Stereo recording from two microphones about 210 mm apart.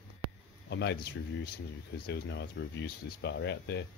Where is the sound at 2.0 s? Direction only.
55° left (ahead or behind).